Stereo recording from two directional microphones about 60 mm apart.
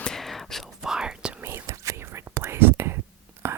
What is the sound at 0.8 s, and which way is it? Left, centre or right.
Whispering, centre.